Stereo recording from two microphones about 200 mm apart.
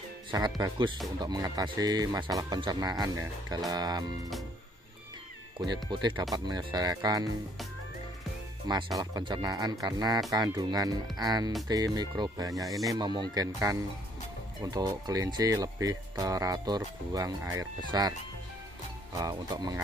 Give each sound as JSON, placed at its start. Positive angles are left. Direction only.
{"t": 0.3, "sound": "speech", "side_deg": -20}
{"t": 5.9, "sound": "speech", "side_deg": -25}
{"t": 8.6, "sound": "speech", "side_deg": -20}
{"t": 12.6, "sound": "speech", "side_deg": 0}
{"t": 12.9, "sound": "speech", "side_deg": -20}
{"t": 14.6, "sound": "speech", "side_deg": -20}
{"t": 19.2, "sound": "speech", "side_deg": -20}